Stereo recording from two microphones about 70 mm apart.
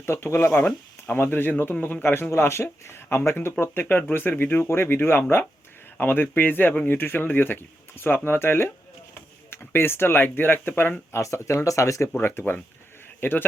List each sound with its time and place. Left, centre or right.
0.0 s speech: left
11.2 s speech: left
12.0 s speech: left